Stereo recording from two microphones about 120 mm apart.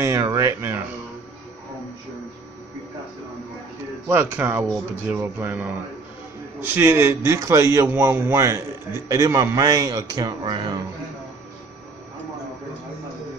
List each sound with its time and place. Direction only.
0.0 s speech: 30° right (ahead or behind)
4.1 s a man's voice: 15° right (ahead or behind); by 10.8 s 40° right (ahead or behind)